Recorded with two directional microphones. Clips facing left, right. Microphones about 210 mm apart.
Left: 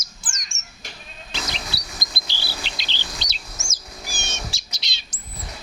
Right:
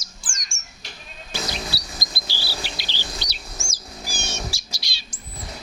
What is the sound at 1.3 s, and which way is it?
Music, 20° left (ahead or behind).